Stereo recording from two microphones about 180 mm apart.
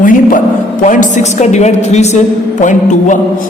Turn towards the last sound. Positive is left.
turn(degrees=45)  # may be behind; listen again after turning